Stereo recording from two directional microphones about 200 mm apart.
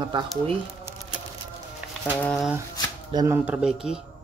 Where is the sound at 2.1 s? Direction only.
5° left (ahead or behind).